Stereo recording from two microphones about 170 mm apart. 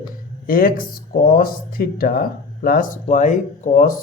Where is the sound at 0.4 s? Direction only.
55° left (ahead or behind).